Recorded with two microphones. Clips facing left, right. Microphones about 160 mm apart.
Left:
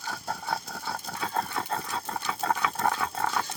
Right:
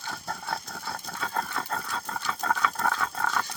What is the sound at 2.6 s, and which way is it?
Roaring cats, 15° left (ahead or behind).